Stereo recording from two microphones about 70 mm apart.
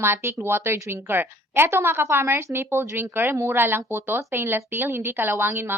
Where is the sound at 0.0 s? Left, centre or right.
Right.